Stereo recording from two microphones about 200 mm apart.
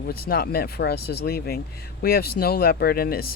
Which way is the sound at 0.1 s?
50° left (ahead or behind).